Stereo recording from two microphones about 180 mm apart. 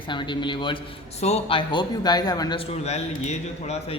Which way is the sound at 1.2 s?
35° left (ahead or behind).